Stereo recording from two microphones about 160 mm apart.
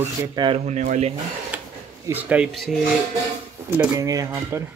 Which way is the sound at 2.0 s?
10° right (ahead or behind).